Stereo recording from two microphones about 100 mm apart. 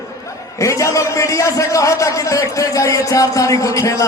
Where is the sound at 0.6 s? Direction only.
30° left (ahead or behind).